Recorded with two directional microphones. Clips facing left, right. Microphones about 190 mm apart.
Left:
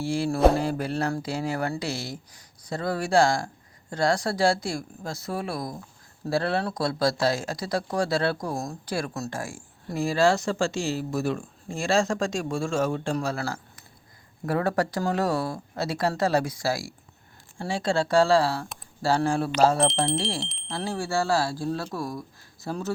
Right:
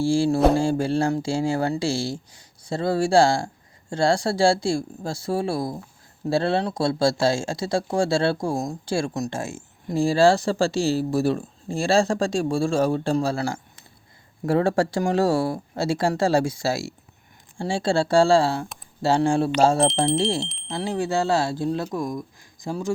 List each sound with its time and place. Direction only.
0.0 s speech: 30° right (ahead or behind)
19.8 s speech: centre (ahead or behind)
20.7 s speech: 20° right (ahead or behind)